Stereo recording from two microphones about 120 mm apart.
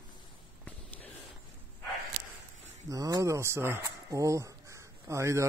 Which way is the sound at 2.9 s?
30° right (ahead or behind).